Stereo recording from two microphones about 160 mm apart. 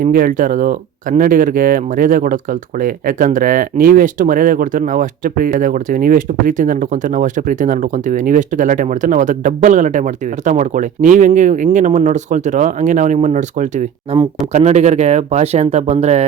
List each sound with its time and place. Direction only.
0.0 s speech: 60° right (ahead or behind); by 16.2 s 45° right (ahead or behind)